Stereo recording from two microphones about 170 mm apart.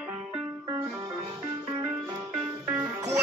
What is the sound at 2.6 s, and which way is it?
Music, 15° right (ahead or behind).